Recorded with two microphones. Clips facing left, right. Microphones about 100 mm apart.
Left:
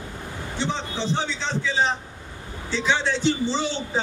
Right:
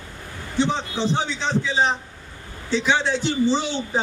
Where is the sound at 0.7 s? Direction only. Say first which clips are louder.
Right 3 dB; 15° right (ahead or behind).